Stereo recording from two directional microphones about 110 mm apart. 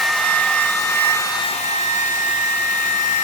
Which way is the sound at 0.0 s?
5° left (ahead or behind).